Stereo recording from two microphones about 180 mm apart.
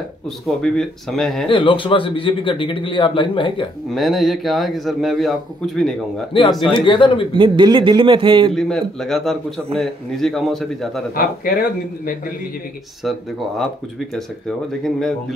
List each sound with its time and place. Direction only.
0.5 s a man's voice: centre (ahead or behind)
1.5 s speech: 30° left (ahead or behind)
3.9 s a man's voice: centre (ahead or behind)
6.3 s speech: 30° left (ahead or behind)
7.3 s a man's voice: 25° right (ahead or behind)
8.5 s a man's voice: 5° left (ahead or behind)
11.1 s speech: 50° left (ahead or behind)
13.0 s a man's voice: centre (ahead or behind)